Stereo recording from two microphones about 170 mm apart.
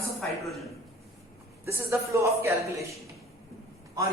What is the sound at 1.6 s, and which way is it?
A man's voice, 15° right (ahead or behind).